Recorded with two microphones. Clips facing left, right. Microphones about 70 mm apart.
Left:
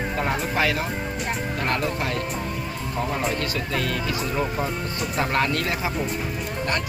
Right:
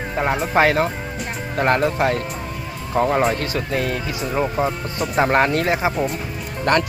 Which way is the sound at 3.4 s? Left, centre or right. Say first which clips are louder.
Right 4 dB; right.